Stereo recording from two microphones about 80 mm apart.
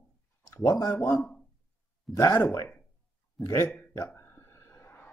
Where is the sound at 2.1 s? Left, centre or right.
Left.